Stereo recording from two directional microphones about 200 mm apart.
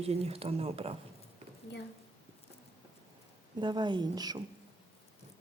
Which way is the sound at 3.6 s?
20° right (ahead or behind).